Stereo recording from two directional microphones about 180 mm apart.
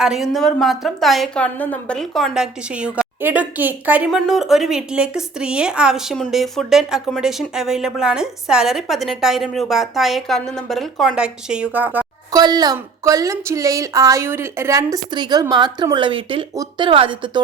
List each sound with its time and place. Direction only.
0.0 s speech: centre (ahead or behind)
12.3 s a woman's voice: 20° right (ahead or behind)